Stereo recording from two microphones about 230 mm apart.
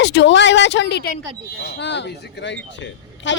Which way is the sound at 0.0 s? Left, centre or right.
Left.